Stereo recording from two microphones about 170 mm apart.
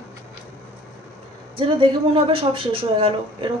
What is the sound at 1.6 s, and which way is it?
Speech, 30° right (ahead or behind).